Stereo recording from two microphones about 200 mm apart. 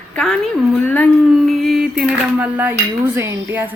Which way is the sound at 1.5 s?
Centre (ahead or behind).